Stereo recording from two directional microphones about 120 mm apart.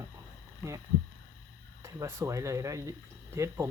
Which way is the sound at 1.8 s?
25° right (ahead or behind).